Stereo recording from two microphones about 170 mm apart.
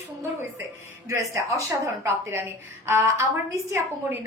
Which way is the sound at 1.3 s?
15° right (ahead or behind).